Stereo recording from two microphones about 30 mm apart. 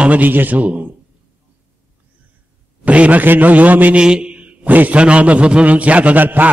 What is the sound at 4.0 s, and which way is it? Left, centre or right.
Mantra, right.